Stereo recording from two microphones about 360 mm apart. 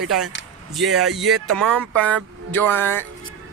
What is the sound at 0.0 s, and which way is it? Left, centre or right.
Speech, centre.